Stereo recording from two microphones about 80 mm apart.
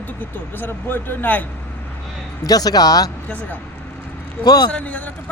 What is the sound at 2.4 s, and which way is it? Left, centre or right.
Speech, left.